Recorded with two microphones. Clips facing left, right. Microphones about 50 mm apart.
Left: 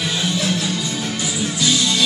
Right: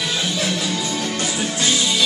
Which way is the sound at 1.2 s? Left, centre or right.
Right.